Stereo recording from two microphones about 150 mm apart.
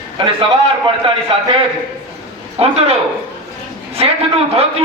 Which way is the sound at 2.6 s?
40° right (ahead or behind).